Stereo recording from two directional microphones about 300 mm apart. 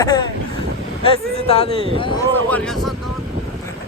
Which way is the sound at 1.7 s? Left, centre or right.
Centre.